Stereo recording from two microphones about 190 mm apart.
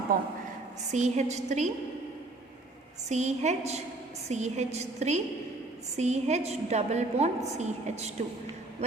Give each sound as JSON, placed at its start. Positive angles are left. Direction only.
{"t": 0.1, "sound": "a woman's voice", "side_deg": -50}
{"t": 0.9, "sound": "a woman's voice", "side_deg": -40}
{"t": 3.1, "sound": "a woman's voice", "side_deg": -35}